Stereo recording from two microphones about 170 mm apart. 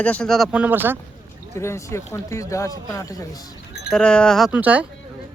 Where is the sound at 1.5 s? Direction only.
15° left (ahead or behind).